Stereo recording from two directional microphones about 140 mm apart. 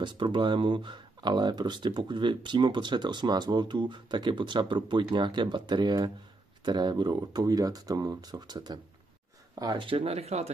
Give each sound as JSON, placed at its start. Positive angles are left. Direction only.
{"t": 0.0, "sound": "speech", "side_deg": -35}